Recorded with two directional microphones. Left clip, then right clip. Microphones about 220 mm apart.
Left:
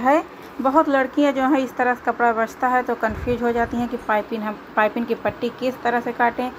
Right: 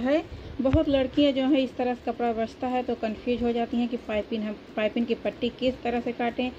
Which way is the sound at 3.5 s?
25° left (ahead or behind).